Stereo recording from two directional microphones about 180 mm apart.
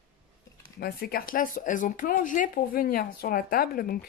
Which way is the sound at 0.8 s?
55° left (ahead or behind).